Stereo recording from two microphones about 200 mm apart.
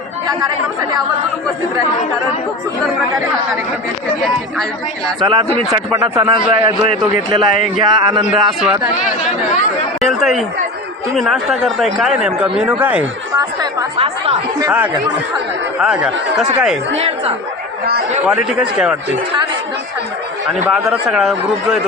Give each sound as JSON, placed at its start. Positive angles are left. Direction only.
{"t": 5.2, "sound": "a man's voice", "side_deg": -25}
{"t": 8.3, "sound": "speech", "side_deg": -5}
{"t": 10.0, "sound": "chatter", "side_deg": 0}
{"t": 11.2, "sound": "speech", "side_deg": 0}
{"t": 13.9, "sound": "a man's voice", "side_deg": -30}
{"t": 15.8, "sound": "speech", "side_deg": -5}
{"t": 17.0, "sound": "a woman's voice", "side_deg": -30}
{"t": 18.3, "sound": "speech", "side_deg": -5}
{"t": 20.7, "sound": "speech", "side_deg": -5}